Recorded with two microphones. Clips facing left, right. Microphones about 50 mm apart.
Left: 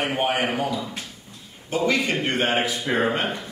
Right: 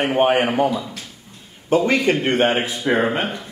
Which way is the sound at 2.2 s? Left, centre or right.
Centre.